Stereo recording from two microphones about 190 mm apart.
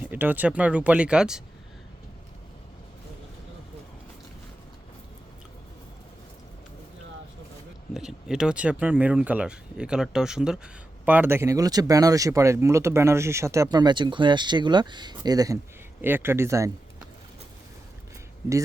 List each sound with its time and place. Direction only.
0.0 s speech: 10° right (ahead or behind)
7.9 s speech: 5° right (ahead or behind)